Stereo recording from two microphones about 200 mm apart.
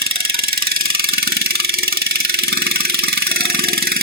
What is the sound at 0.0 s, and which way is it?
Engine, 50° right (ahead or behind).